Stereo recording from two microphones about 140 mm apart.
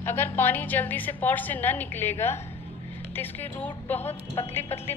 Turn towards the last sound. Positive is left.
turn(degrees=15)  # may be behind; listen again after turning